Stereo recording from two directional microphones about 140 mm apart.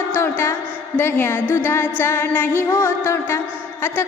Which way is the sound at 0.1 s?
20° left (ahead or behind).